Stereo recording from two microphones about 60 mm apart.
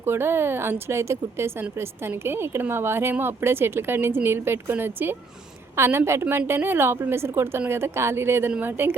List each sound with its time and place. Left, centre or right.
0.0 s speech: right
5.7 s speech: right